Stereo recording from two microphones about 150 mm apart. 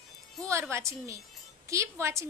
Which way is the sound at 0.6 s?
20° right (ahead or behind).